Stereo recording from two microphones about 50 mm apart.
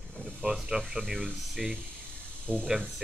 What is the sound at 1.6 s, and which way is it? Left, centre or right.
Speech, centre.